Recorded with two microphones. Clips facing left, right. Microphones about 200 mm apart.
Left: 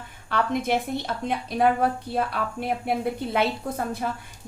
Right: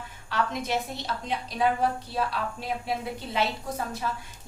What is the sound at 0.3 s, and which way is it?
A woman's voice, 55° left (ahead or behind).